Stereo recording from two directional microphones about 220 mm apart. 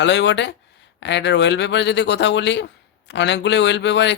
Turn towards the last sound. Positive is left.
turn(degrees=55)  # may be behind; listen again after turning